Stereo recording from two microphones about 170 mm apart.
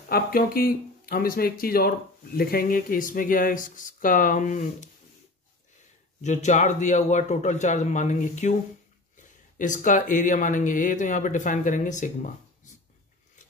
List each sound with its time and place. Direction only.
0.1 s speech: 60° left (ahead or behind)
6.2 s speech: 45° left (ahead or behind)
9.6 s speech: 50° left (ahead or behind)